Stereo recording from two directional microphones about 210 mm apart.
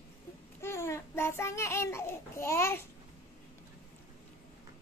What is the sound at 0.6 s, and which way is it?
Babbling, 10° left (ahead or behind).